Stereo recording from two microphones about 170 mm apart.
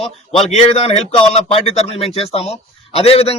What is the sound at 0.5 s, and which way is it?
A man's voice, 40° left (ahead or behind).